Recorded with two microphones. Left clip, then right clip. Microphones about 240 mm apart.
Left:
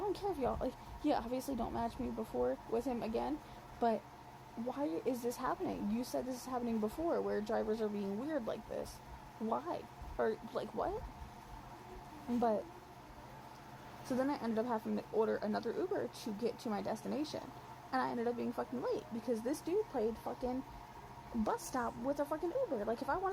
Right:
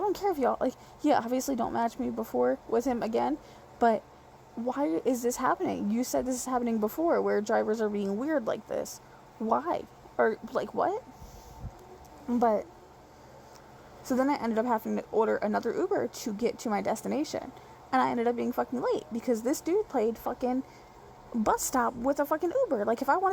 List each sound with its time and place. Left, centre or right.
0.1 s speech: right
12.4 s speech: right
14.1 s speech: right